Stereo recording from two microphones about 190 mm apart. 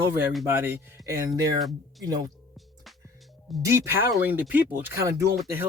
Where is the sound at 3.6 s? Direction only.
15° right (ahead or behind).